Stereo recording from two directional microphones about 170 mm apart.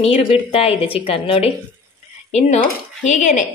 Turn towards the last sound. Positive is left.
turn(degrees=45)  # may be behind; listen again after turning